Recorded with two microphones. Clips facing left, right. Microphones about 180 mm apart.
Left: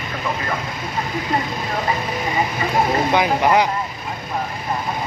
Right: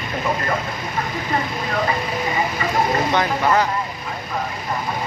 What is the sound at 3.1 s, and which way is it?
Speech, 15° left (ahead or behind).